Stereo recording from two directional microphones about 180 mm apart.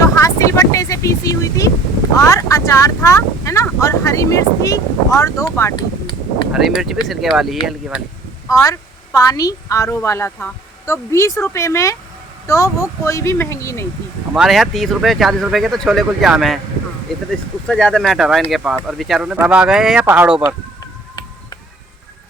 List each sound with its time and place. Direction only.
0.0 s vehicle: 20° left (ahead or behind)
2.1 s speech: 20° left (ahead or behind)
6.5 s speech: centre (ahead or behind)
8.6 s speech: 20° left (ahead or behind)
14.3 s speech: centre (ahead or behind)